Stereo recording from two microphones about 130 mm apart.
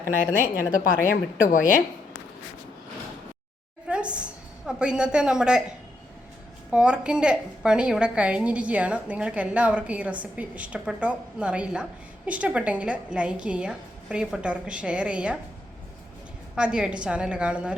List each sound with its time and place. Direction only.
1.0 s speech: 90° left
3.8 s a woman's voice: 10° right (ahead or behind)
6.7 s a woman's voice: 10° right (ahead or behind)
16.6 s a woman's voice: 5° right (ahead or behind)